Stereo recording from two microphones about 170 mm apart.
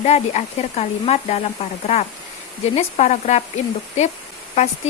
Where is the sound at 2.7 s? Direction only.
40° left (ahead or behind).